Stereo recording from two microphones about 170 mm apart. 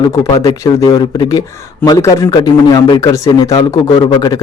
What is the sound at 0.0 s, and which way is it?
Speech, 20° left (ahead or behind).